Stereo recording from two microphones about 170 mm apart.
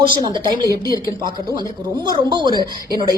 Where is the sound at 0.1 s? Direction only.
25° right (ahead or behind).